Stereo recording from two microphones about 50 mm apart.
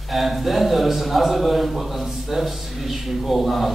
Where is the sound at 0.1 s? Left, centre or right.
Centre.